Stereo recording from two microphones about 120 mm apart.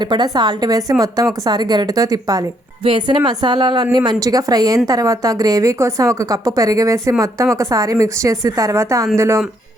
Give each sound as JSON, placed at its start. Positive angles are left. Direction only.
{"t": 0.0, "sound": "a woman's voice", "side_deg": -40}
{"t": 2.8, "sound": "a woman's voice", "side_deg": -45}